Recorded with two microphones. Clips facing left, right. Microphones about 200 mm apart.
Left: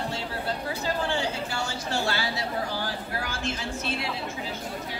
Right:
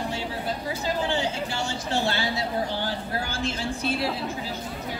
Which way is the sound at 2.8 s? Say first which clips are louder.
Right 3 dB; 30° right (ahead or behind).